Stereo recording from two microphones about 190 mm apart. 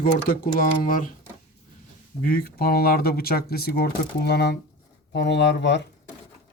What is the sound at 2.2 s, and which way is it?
Speech, 50° left (ahead or behind).